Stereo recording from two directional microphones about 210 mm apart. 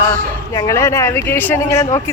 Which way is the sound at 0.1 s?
15° left (ahead or behind).